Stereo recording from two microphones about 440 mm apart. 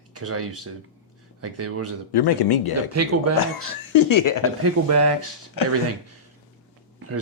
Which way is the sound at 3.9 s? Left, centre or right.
Left.